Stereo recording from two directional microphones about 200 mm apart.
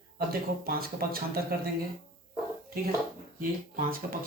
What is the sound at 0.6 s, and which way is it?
A man's voice, 50° right (ahead or behind).